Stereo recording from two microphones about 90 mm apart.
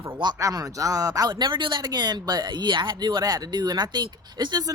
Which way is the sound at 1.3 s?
60° right (ahead or behind).